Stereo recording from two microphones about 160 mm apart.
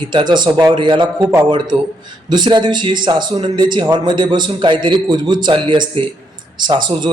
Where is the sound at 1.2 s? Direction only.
15° right (ahead or behind).